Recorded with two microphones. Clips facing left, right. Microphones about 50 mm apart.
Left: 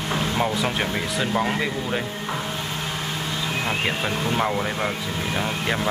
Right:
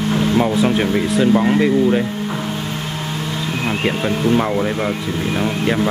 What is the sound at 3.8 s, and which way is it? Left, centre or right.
Speech, centre.